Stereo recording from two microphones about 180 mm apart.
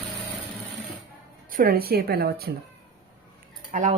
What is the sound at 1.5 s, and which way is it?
A woman's voice, 55° right (ahead or behind).